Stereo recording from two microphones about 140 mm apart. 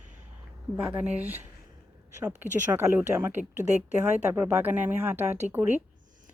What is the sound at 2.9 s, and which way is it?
Speech, 15° right (ahead or behind).